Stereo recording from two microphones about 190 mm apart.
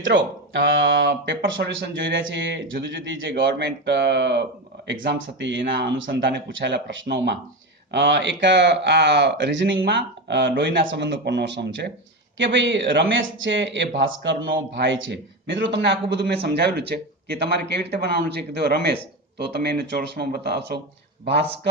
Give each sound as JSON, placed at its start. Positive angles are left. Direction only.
{"t": 0.0, "sound": "speech", "side_deg": -75}
{"t": 4.9, "sound": "speech", "side_deg": -80}